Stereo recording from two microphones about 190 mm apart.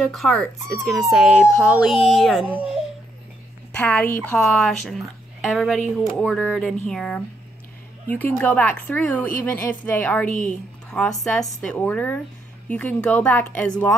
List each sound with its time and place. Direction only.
0.0 s speech: centre (ahead or behind)
3.7 s speech: 5° left (ahead or behind)
10.3 s a woman's voice: 40° left (ahead or behind)
10.9 s speech: centre (ahead or behind)